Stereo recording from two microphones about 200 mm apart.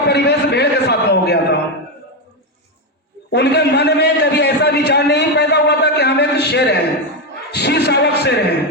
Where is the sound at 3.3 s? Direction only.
55° left (ahead or behind).